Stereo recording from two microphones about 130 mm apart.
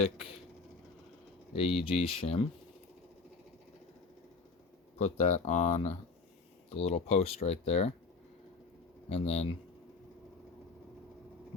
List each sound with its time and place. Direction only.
0.0 s speech: 50° left (ahead or behind)
1.5 s speech: 50° left (ahead or behind)
4.9 s speech: 60° left (ahead or behind)
9.0 s speech: 55° left (ahead or behind)